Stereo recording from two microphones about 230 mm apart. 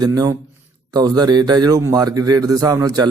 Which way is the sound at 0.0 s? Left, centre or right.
Centre.